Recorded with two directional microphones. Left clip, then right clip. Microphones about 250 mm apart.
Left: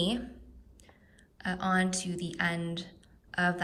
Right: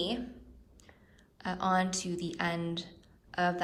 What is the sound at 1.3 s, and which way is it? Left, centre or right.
Speech, centre.